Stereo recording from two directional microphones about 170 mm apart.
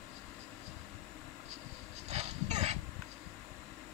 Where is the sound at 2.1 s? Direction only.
40° right (ahead or behind).